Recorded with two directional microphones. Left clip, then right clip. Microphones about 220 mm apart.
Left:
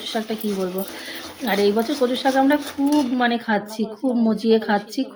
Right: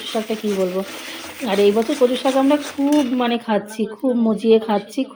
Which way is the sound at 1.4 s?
Centre (ahead or behind).